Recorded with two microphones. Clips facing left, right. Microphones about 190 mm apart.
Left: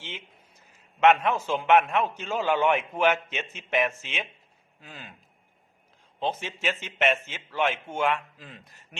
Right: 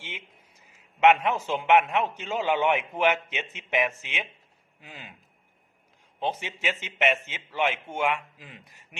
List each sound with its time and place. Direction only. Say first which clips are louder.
0.0 s a sound: left 1 dB; 10° right (ahead or behind)
0.9 s a man's voice: even; 15° right (ahead or behind)
6.1 s a man's voice: even; 15° right (ahead or behind)